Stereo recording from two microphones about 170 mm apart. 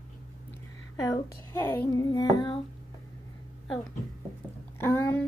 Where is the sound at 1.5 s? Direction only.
15° left (ahead or behind).